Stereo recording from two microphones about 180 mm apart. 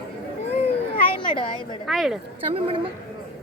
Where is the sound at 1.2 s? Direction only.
25° left (ahead or behind).